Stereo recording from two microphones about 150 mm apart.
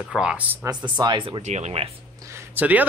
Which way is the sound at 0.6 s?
30° right (ahead or behind).